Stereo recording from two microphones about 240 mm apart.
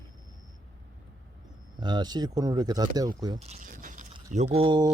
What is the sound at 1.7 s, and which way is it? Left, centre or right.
Speech, centre.